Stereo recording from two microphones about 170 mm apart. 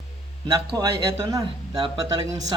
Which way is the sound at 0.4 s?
30° right (ahead or behind).